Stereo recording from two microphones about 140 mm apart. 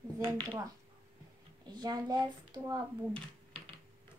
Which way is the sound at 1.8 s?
30° right (ahead or behind).